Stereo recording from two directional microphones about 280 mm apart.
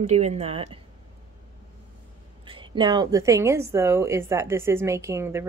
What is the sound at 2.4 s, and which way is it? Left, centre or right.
A woman's voice, centre.